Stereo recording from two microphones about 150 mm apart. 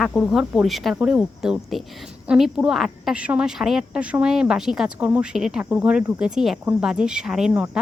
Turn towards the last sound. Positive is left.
turn(degrees=-5)  # may be behind; listen again after turning